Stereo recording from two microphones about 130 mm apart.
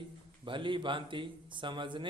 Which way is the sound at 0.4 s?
40° right (ahead or behind).